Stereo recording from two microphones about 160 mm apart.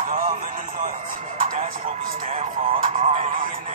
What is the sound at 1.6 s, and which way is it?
Music, 60° right (ahead or behind).